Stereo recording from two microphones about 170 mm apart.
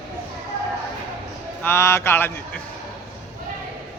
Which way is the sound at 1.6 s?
15° left (ahead or behind).